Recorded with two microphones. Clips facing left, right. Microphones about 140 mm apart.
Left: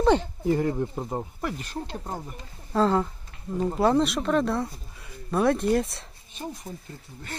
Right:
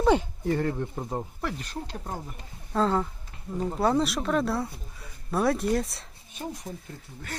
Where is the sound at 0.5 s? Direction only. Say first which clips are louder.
Left 3 dB; 10° left (ahead or behind).